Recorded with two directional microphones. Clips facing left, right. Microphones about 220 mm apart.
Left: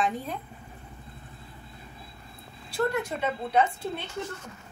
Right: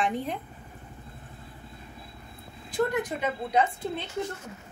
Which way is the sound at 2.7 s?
15° right (ahead or behind).